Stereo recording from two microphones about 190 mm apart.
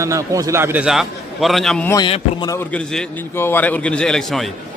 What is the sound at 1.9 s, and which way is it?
Speech, 20° left (ahead or behind).